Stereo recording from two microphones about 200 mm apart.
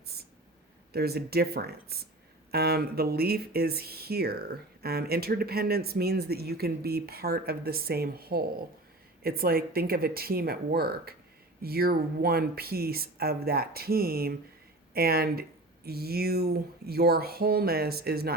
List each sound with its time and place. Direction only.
0.9 s speech: 50° right (ahead or behind)